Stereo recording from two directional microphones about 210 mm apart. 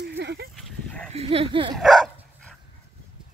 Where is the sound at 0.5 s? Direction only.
5° left (ahead or behind).